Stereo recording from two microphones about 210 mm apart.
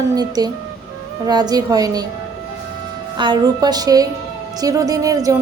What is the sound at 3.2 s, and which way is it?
A woman's voice, 20° right (ahead or behind).